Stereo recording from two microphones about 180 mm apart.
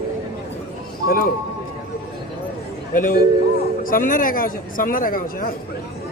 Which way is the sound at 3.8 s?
50° left (ahead or behind).